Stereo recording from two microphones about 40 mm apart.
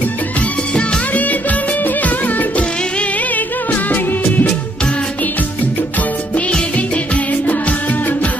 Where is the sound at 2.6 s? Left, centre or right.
Left.